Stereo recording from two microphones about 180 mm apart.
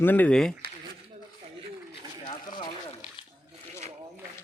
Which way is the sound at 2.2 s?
25° left (ahead or behind).